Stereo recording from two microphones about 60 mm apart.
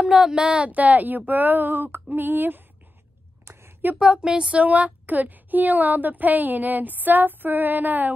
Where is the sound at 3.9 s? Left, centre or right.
Centre; by 8.1 s right.